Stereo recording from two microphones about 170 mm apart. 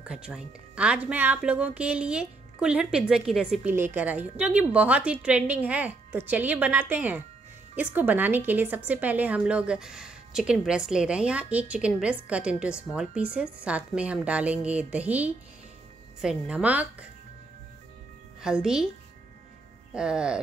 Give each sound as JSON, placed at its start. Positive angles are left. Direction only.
{"t": 0.0, "sound": "speech", "side_deg": -5}
{"t": 18.4, "sound": "speech", "side_deg": -5}
{"t": 19.9, "sound": "speech", "side_deg": -5}